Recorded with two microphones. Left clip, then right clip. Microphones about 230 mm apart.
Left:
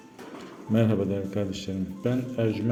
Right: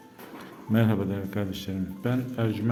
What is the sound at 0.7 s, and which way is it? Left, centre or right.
A man's voice, centre.